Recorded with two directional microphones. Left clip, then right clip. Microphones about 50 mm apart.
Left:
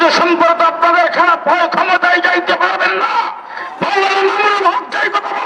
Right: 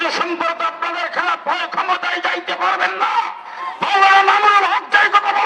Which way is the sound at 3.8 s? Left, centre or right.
Right.